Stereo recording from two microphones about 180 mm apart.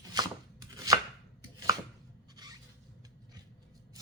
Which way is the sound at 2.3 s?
20° right (ahead or behind).